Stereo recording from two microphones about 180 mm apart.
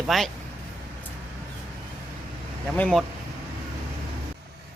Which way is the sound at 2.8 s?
5° left (ahead or behind).